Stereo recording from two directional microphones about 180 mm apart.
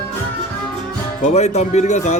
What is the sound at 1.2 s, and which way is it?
Speech, 40° left (ahead or behind).